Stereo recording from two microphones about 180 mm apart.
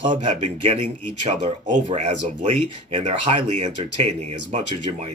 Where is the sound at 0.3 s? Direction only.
35° right (ahead or behind).